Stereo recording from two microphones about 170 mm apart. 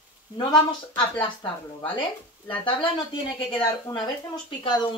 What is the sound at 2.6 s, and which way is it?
Speech, 30° left (ahead or behind).